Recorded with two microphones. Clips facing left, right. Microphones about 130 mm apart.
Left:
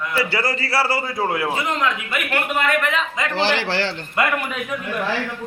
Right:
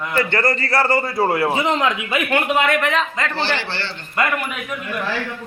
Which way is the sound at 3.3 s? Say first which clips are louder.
Left 7 dB; 90° left.